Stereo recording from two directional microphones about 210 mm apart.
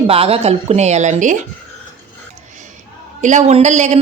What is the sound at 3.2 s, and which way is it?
Speech, 35° right (ahead or behind).